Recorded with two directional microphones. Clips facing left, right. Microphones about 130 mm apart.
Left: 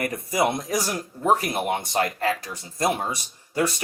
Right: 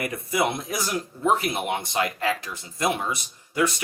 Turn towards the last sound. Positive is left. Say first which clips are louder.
# even
turn(degrees=35)  # may be behind; listen again after turning